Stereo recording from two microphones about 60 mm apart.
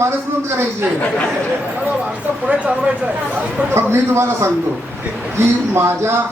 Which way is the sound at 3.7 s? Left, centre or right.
Right.